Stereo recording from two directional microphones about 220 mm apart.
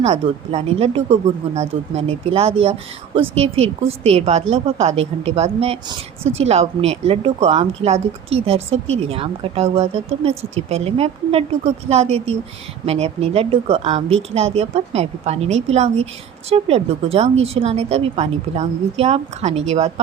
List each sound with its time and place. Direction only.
0.0 s a woman's voice: 30° right (ahead or behind)